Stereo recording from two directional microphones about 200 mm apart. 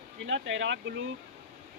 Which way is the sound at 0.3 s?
65° right (ahead or behind).